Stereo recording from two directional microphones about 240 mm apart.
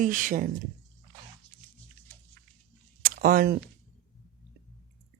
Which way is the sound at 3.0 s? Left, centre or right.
Right.